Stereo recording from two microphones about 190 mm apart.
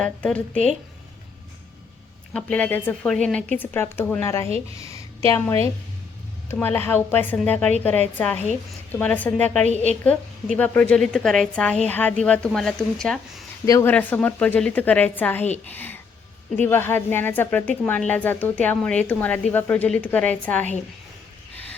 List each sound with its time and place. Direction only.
0.0 s a woman's voice: 5° left (ahead or behind)
2.3 s speech: 5° left (ahead or behind)
8.9 s a woman's voice: 10° left (ahead or behind)
13.7 s speech: 15° left (ahead or behind)